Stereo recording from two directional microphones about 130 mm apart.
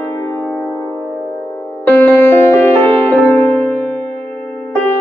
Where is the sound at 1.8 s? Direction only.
15° left (ahead or behind).